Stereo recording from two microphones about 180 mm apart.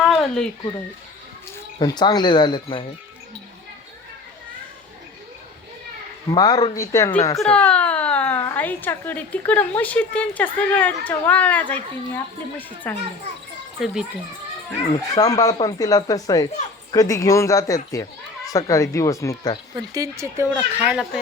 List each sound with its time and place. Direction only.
0.0 s a sound: centre (ahead or behind)
1.8 s speech: 20° left (ahead or behind)
6.3 s a woman's voice: 20° left (ahead or behind)
13.7 s speech: centre (ahead or behind)
15.1 s a woman's voice: 20° left (ahead or behind)
19.7 s speech: 20° right (ahead or behind)
20.8 s speech: centre (ahead or behind)